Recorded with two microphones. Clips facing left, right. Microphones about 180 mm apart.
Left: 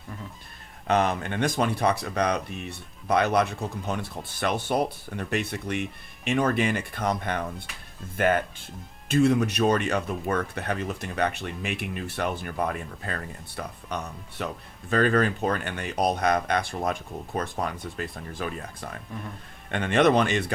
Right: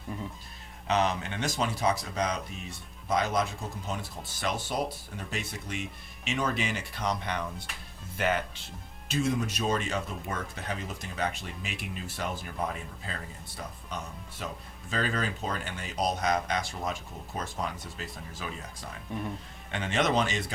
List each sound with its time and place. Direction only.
0.9 s speech: 55° left (ahead or behind)